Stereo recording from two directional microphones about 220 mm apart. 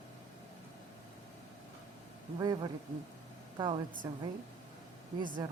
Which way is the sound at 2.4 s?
20° right (ahead or behind).